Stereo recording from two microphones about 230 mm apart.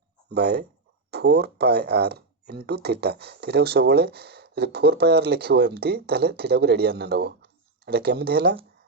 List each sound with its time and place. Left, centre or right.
0.3 s speech: right